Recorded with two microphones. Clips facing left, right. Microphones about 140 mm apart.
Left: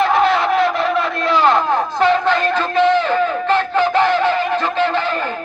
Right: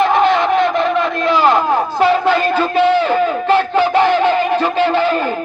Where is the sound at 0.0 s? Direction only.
Centre (ahead or behind).